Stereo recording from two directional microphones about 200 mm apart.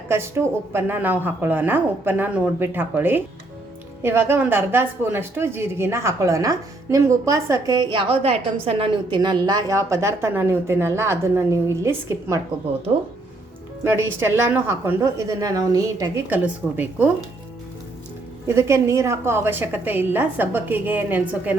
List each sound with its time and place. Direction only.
0.1 s speech: 10° right (ahead or behind)
13.8 s speech: 10° right (ahead or behind)
18.4 s speech: 15° right (ahead or behind)